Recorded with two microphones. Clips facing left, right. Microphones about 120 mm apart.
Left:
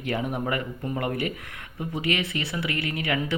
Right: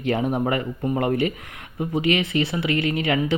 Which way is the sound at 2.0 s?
20° right (ahead or behind).